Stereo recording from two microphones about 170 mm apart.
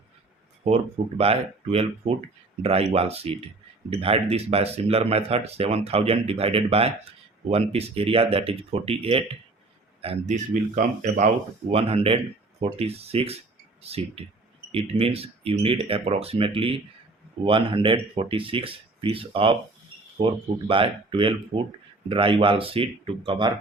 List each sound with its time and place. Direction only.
1.2 s speech: 35° right (ahead or behind)
11.7 s speech: 35° right (ahead or behind)